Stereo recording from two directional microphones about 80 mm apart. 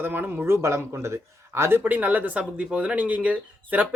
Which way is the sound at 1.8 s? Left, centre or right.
Right.